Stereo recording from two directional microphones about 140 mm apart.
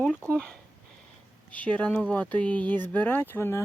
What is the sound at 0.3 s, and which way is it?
Speech, 5° left (ahead or behind).